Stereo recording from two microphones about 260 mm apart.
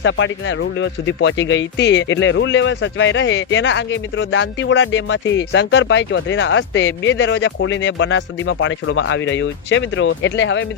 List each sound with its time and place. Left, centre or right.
0.0 s speech: left